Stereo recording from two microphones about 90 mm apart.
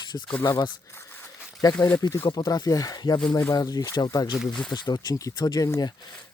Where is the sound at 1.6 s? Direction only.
50° left (ahead or behind).